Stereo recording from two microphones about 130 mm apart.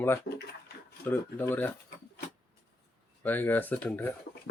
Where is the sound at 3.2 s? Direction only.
15° left (ahead or behind).